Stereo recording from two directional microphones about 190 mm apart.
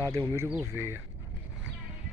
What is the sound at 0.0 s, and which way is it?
Speech, 20° right (ahead or behind).